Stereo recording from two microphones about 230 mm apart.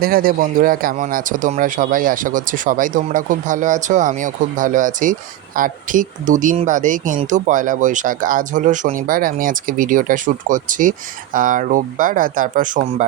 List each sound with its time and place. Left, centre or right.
0.0 s speech: right